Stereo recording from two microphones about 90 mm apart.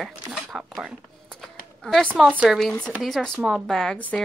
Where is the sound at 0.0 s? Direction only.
5° right (ahead or behind).